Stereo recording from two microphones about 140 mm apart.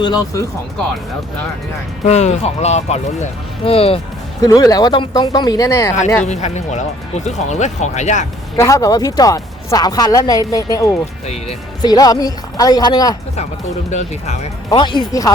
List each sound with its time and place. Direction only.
0.0 s speech: 30° left (ahead or behind)
2.0 s speech: 50° left (ahead or behind)
4.4 s speech: 25° left (ahead or behind)
6.2 s speech: 55° left (ahead or behind)
8.5 s speech: 20° left (ahead or behind)
13.9 s speech: 50° left (ahead or behind)
14.7 s speech: 35° left (ahead or behind)